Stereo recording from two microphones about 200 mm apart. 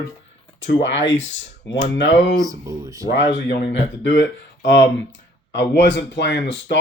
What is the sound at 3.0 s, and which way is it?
Speech, 60° left (ahead or behind).